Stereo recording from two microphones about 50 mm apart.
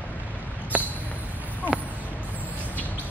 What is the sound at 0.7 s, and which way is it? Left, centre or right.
Basketball bounce, right.